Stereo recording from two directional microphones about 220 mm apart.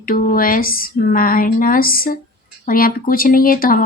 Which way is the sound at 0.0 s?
40° left (ahead or behind).